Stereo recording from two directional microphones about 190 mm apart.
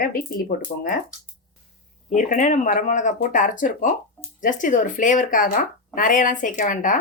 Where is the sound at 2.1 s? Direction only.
40° left (ahead or behind).